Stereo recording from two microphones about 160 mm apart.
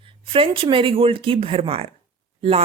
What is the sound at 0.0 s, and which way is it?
Speech, 35° right (ahead or behind).